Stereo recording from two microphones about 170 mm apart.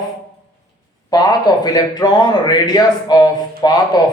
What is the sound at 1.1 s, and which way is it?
A man's voice, 25° left (ahead or behind).